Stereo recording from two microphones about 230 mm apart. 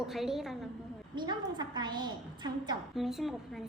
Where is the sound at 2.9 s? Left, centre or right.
Centre.